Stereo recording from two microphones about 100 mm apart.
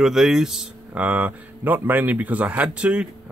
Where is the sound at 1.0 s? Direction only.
15° right (ahead or behind).